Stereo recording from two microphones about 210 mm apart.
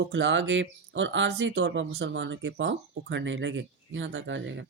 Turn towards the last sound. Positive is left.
turn(degrees=-60)  # may be behind; listen again after turning